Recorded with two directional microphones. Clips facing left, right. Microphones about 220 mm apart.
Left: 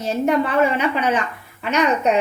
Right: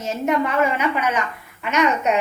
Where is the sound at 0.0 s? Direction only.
35° left (ahead or behind).